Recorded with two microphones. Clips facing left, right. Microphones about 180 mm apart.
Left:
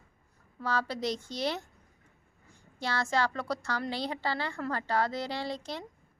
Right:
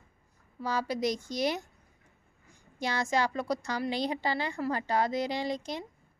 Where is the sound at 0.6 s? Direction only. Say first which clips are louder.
Right 1 dB; 15° right (ahead or behind).